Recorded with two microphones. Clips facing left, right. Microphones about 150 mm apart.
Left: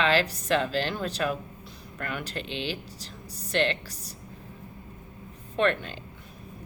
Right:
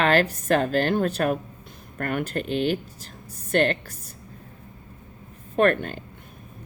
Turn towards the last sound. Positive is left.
turn(degrees=-50)  # may be behind; listen again after turning